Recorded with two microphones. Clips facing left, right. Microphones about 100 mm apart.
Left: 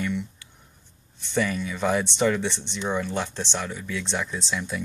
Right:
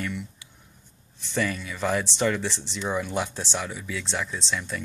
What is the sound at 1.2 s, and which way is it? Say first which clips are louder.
Speech: left 2 dB; centre (ahead or behind).